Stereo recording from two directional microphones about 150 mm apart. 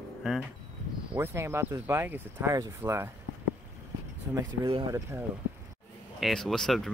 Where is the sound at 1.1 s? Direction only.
15° right (ahead or behind).